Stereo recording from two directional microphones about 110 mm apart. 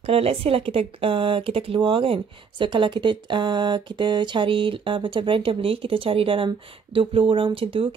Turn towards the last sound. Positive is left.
turn(degrees=-55)  # may be behind; listen again after turning